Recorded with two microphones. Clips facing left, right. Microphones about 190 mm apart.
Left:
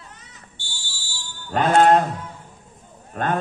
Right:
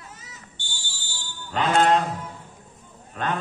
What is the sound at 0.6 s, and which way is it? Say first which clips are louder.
Fire alarm: even; 20° right (ahead or behind).